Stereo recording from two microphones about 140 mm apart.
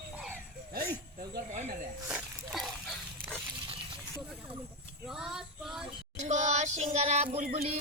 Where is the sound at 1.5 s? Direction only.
60° right (ahead or behind).